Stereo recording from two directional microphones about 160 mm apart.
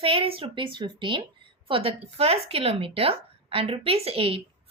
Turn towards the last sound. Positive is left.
turn(degrees=-35)  # may be behind; listen again after turning